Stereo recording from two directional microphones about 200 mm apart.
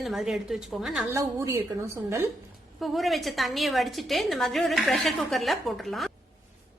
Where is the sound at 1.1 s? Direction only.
15° right (ahead or behind).